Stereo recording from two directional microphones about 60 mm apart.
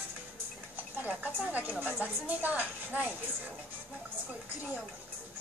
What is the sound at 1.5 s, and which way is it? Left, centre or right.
A woman's voice, right.